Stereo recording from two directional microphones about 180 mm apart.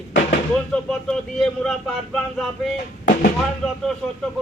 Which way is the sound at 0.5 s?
5° left (ahead or behind).